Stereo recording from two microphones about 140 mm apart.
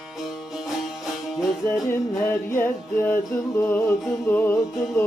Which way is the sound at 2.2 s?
15° left (ahead or behind).